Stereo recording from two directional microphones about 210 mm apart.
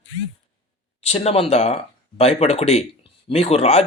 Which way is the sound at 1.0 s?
30° left (ahead or behind).